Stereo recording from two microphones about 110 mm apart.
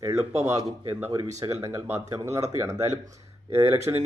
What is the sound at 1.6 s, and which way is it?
Speech, 25° right (ahead or behind).